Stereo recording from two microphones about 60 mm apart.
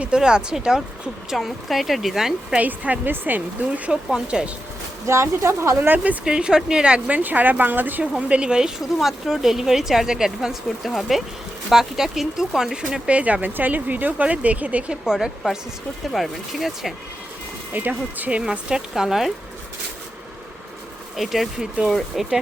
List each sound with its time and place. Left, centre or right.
0.0 s speech: centre
1.4 s speech: centre
2.6 s speech: right
3.8 s speech: centre
5.0 s speech: right
6.2 s speech: centre
7.2 s speech: right
8.3 s speech: centre
13.1 s speech: right
15.0 s speech: centre
17.7 s speech: right
18.7 s speech: centre
21.2 s speech: centre